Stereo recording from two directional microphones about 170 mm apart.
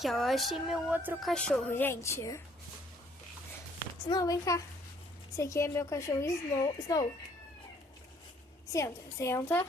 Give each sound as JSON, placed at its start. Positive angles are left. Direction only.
{"t": 0.0, "sound": "speech", "side_deg": 0}
{"t": 1.2, "sound": "a woman's voice", "side_deg": 5}
{"t": 4.1, "sound": "a child's voice", "side_deg": 20}
{"t": 8.7, "sound": "a woman's voice", "side_deg": 20}